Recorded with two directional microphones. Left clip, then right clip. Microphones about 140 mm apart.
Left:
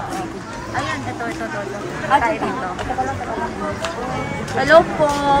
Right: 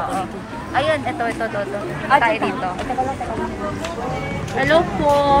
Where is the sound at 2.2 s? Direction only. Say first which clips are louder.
Right 3 dB; 5° left (ahead or behind).